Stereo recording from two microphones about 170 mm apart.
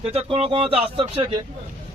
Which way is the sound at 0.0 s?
35° right (ahead or behind).